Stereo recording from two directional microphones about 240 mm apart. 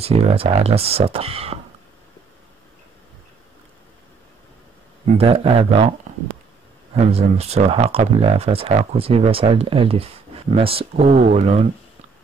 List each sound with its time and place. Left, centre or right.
0.0 s speech: right
5.1 s speech: right
7.0 s speech: right